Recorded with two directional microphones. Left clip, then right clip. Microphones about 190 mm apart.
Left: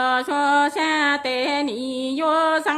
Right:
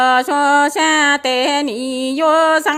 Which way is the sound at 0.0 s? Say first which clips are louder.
Right 7 dB; 35° right (ahead or behind).